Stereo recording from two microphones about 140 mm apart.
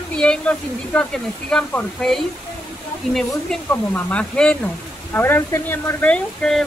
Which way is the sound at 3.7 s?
10° left (ahead or behind).